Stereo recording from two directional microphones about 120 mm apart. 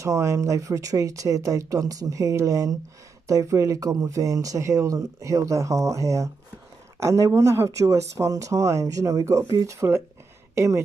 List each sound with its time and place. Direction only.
0.0 s a woman's voice: 25° right (ahead or behind)